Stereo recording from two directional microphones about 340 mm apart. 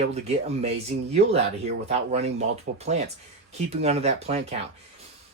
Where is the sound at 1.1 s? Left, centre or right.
Centre.